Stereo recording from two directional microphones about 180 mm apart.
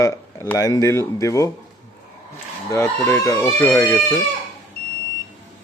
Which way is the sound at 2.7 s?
15° left (ahead or behind).